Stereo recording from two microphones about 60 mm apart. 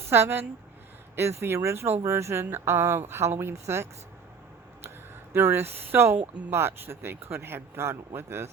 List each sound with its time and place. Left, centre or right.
0.1 s speech: right
5.3 s speech: right